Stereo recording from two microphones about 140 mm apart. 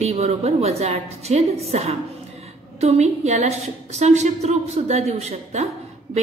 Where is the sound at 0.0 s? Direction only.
50° right (ahead or behind).